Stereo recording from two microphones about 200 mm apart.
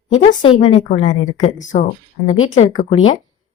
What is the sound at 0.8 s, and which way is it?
Speech, 35° left (ahead or behind).